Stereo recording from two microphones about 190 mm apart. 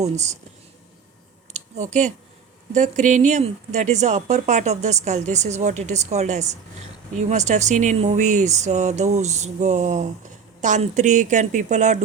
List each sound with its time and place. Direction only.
0.0 s a woman's voice: 35° right (ahead or behind)
1.5 s a woman's voice: 40° right (ahead or behind)